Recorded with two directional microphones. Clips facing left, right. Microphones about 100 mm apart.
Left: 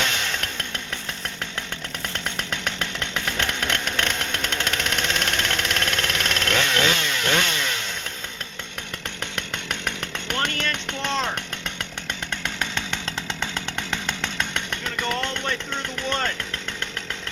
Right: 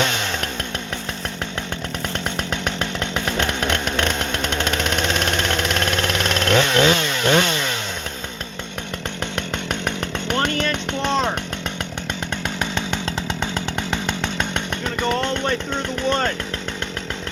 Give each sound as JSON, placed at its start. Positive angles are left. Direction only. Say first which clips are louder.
{"t": 0.0, "sound": "chainsaw", "louder": "right 4 dB", "side_deg": -30}
{"t": 2.1, "sound": "chainsaw", "louder": "right 4 dB", "side_deg": -20}
{"t": 9.2, "sound": "chainsaw", "louder": "right 5 dB", "side_deg": -25}
{"t": 12.5, "sound": "chainsaw", "louder": "right 6 dB", "side_deg": -15}